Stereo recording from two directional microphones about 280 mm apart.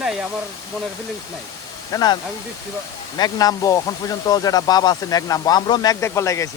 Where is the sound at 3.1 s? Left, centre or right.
Centre.